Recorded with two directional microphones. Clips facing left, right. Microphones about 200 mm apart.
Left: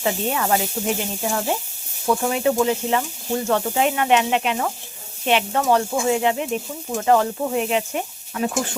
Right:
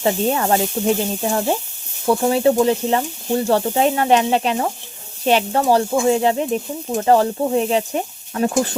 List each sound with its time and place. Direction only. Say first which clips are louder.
0.0 s speech: right 4 dB; 35° right (ahead or behind)